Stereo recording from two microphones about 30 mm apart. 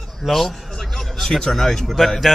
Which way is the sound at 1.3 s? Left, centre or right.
Centre.